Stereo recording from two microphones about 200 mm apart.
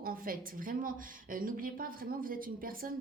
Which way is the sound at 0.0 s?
45° right (ahead or behind).